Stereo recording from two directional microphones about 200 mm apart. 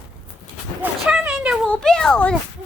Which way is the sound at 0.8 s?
5° right (ahead or behind).